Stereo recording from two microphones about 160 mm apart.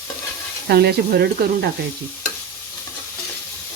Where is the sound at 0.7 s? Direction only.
85° right.